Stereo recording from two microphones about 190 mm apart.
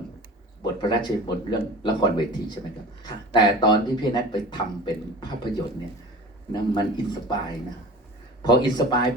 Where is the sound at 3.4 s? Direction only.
20° left (ahead or behind).